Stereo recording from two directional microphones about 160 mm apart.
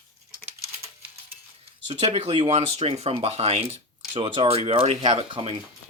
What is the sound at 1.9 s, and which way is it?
Speech, 35° right (ahead or behind).